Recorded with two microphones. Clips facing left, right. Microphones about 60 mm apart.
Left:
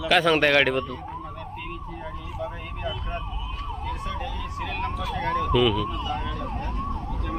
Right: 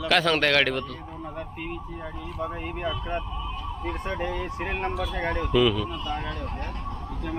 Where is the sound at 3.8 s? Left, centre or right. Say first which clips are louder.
Right 3 dB; right.